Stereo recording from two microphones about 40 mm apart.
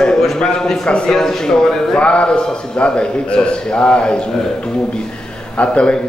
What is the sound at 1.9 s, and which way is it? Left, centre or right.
Speech, left.